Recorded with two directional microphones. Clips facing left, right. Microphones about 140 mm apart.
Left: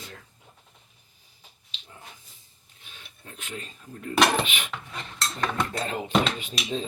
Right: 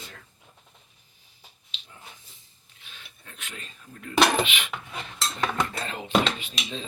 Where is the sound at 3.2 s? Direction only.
35° left (ahead or behind).